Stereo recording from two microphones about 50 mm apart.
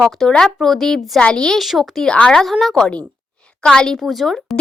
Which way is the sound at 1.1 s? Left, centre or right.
Centre.